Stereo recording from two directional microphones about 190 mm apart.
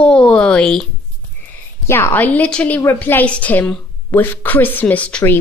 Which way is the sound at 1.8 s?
10° left (ahead or behind).